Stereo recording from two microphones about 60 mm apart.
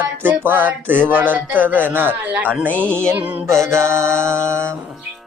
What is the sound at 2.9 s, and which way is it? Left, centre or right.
Music, centre.